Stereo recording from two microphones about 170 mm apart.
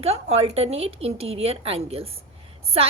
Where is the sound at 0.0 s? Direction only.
40° right (ahead or behind).